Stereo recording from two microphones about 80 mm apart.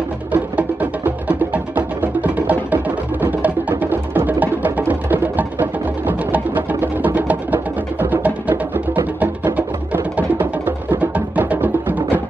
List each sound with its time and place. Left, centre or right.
0.3 s music: right